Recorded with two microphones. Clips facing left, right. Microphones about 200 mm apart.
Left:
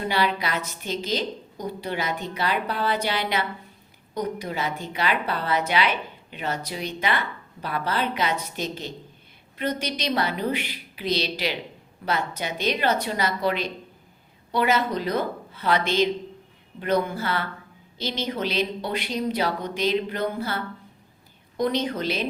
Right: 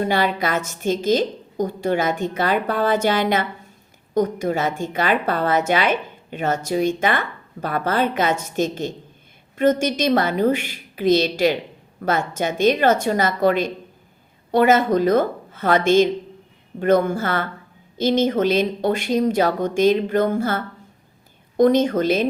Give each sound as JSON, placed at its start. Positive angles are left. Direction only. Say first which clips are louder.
{"t": 0.1, "sound": "a woman's voice", "louder": "right 5 dB", "side_deg": -50}
{"t": 21.6, "sound": "a woman's voice", "louder": "right 9 dB", "side_deg": -45}